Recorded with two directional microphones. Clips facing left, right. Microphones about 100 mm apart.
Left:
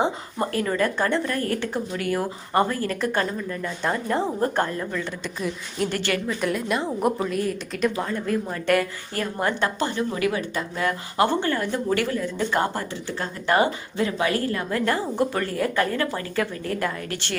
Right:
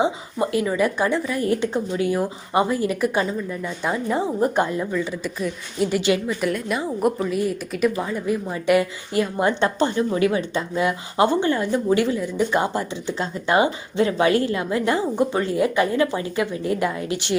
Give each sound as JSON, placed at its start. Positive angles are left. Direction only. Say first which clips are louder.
{"t": 0.0, "sound": "speech", "louder": "right 3 dB", "side_deg": -5}
{"t": 1.5, "sound": "a woman's voice", "louder": "right 5 dB", "side_deg": -20}
{"t": 6.0, "sound": "speech", "louder": "right 5 dB", "side_deg": -15}
{"t": 6.4, "sound": "speech", "louder": "right 1 dB", "side_deg": 0}